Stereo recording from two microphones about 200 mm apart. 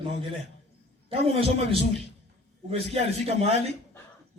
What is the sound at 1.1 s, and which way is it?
A man's voice, 25° right (ahead or behind).